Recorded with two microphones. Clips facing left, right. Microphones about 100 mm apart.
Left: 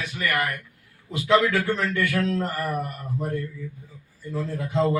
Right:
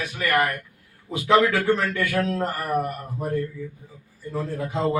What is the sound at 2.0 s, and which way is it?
Speech, 50° right (ahead or behind).